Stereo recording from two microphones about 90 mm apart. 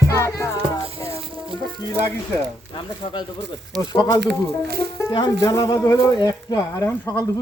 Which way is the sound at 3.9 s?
50° left (ahead or behind).